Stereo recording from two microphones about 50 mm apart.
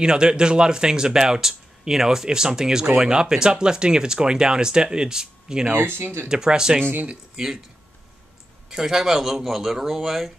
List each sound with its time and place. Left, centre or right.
0.0 s speech: centre
5.7 s speech: right
6.2 s speech: centre
8.6 s speech: centre